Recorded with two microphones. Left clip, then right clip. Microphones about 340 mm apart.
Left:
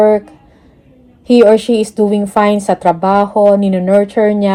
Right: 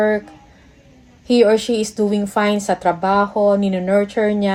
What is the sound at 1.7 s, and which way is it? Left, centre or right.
A woman's voice, centre.